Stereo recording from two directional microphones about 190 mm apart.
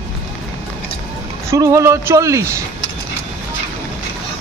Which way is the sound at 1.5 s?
15° right (ahead or behind).